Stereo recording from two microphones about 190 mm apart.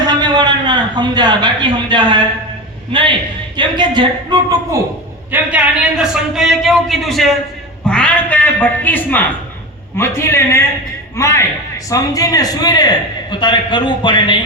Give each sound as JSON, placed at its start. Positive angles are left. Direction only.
{"t": 0.1, "sound": "a man's voice", "side_deg": -25}
{"t": 5.3, "sound": "a man's voice", "side_deg": -5}